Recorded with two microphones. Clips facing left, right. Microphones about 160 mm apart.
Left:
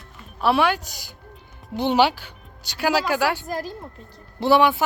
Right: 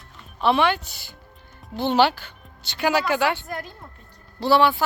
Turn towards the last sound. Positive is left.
turn(degrees=15)  # may be behind; listen again after turning